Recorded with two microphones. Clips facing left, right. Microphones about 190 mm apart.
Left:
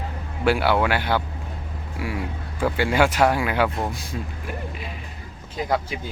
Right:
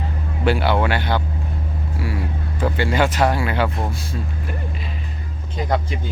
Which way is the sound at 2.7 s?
10° left (ahead or behind).